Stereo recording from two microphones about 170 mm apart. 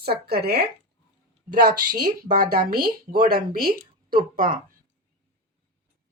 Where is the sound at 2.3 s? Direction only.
60° right (ahead or behind).